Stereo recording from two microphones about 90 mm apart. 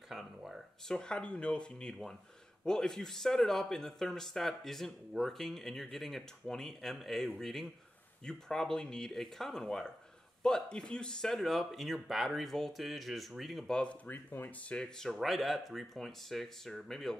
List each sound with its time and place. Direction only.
0.1 s speech: 5° right (ahead or behind)
0.8 s speech: 10° left (ahead or behind)
14.0 s speech: 20° left (ahead or behind); by 17.2 s 5° left (ahead or behind)